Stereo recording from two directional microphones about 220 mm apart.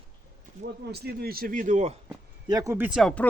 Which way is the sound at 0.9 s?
45° right (ahead or behind).